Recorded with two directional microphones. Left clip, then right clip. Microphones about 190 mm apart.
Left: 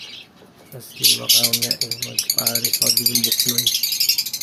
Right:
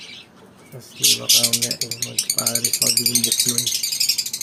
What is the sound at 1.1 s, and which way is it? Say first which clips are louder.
Speech: even; 5° left (ahead or behind).